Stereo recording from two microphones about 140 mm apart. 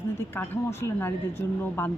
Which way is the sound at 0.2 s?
15° left (ahead or behind).